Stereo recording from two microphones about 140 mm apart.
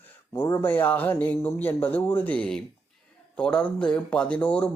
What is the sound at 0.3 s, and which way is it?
Speech, 20° left (ahead or behind).